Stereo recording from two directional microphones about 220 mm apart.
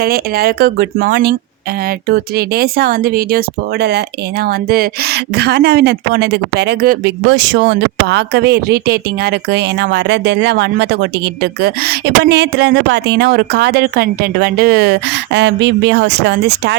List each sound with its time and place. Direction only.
0.0 s speech: 45° right (ahead or behind)